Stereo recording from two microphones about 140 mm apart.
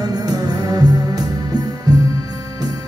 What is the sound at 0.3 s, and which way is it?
Music, 25° right (ahead or behind).